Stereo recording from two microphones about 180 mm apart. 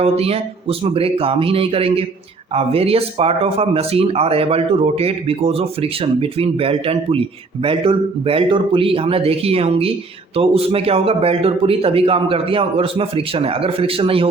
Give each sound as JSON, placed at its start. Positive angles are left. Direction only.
{"t": 0.0, "sound": "speech", "side_deg": -35}